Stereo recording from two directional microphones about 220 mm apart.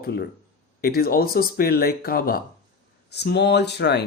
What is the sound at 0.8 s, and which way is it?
Speech, 45° left (ahead or behind).